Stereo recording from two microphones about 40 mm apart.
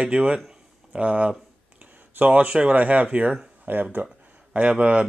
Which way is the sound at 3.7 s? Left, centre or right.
Right.